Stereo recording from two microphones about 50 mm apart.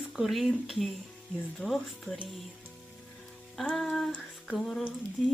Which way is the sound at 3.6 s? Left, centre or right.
Centre.